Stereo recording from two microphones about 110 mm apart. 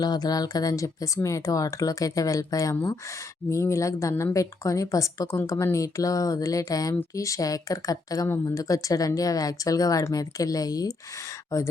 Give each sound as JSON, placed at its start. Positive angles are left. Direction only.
{"t": 0.0, "sound": "speech", "side_deg": 40}